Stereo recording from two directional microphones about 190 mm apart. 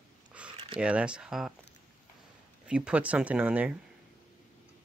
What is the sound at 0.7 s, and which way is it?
Speech, 5° right (ahead or behind).